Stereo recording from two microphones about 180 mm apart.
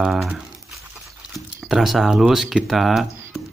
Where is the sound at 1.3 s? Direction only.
Centre (ahead or behind).